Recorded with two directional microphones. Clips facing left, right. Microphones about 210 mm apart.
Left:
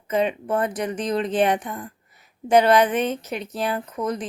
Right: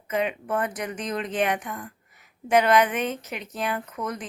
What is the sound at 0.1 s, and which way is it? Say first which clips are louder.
Speech: left 4 dB; 30° left (ahead or behind).